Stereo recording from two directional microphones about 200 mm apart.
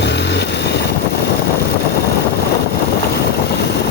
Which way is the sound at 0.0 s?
60° left (ahead or behind).